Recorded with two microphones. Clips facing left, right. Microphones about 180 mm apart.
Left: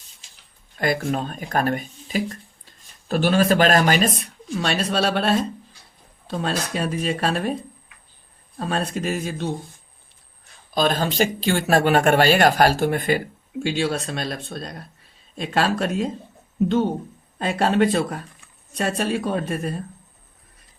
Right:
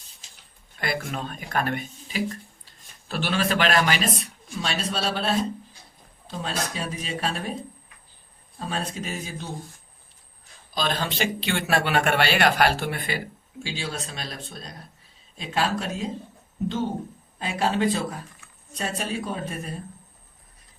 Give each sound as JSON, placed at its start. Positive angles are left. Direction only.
{"t": 0.8, "sound": "speech", "side_deg": 45}
{"t": 4.2, "sound": "speech", "side_deg": 60}
{"t": 8.5, "sound": "speech", "side_deg": 60}
{"t": 10.8, "sound": "speech", "side_deg": 45}